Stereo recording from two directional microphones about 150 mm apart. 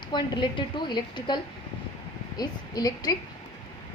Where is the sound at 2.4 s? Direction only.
25° left (ahead or behind).